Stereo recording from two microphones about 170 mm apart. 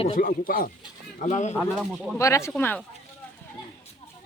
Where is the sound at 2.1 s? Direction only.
15° left (ahead or behind).